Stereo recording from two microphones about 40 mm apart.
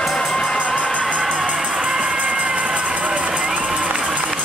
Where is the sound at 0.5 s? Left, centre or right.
Left.